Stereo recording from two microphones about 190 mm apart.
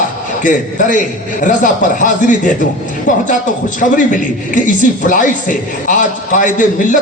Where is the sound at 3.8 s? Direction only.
45° left (ahead or behind).